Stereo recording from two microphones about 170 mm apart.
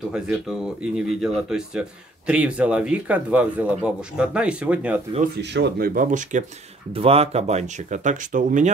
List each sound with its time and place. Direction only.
0.1 s speech: 5° right (ahead or behind)
5.4 s speech: 85° right; by 6.4 s 50° right (ahead or behind)
6.9 s speech: 35° right (ahead or behind)